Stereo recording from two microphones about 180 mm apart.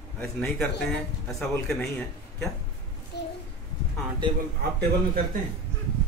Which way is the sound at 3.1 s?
65° left (ahead or behind).